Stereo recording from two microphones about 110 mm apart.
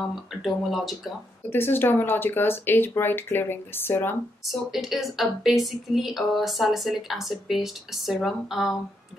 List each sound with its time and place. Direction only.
0.0 s a woman's voice: centre (ahead or behind)
1.5 s speech: 20° left (ahead or behind)
4.5 s a woman's voice: centre (ahead or behind)